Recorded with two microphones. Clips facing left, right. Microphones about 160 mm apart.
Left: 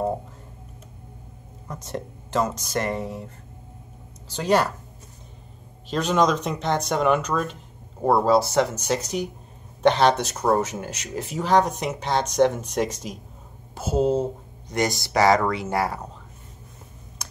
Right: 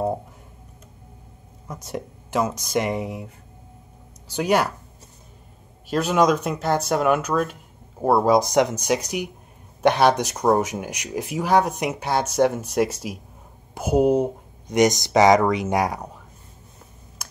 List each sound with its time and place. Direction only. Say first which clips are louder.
1.7 s speech: right 1 dB; 10° right (ahead or behind)
4.3 s speech: even; 10° right (ahead or behind)
5.9 s speech: right 2 dB; 5° right (ahead or behind)